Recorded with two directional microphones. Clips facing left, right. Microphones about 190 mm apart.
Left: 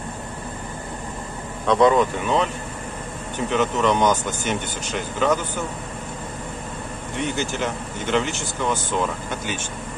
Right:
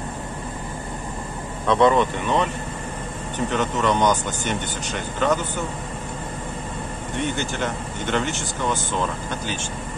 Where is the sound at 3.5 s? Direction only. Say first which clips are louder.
Left 2 dB; centre (ahead or behind).